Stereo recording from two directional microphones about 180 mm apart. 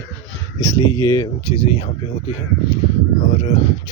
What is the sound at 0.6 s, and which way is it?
Speech, 15° left (ahead or behind).